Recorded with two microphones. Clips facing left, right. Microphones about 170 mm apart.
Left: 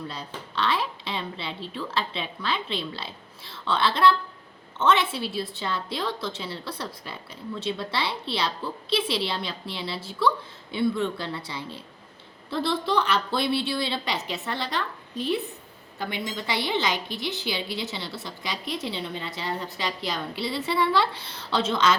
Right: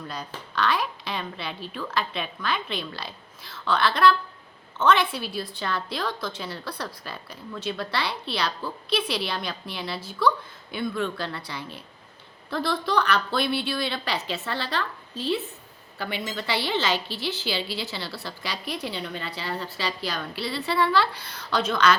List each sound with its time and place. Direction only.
0.5 s a woman's voice: 25° left (ahead or behind)